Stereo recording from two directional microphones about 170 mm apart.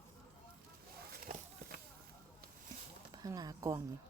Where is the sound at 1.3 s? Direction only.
60° right (ahead or behind).